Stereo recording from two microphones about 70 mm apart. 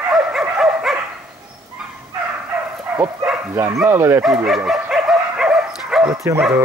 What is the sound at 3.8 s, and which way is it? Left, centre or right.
Speech, right.